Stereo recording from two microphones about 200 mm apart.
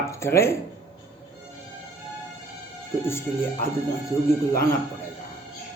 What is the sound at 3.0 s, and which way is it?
Speech, 10° left (ahead or behind).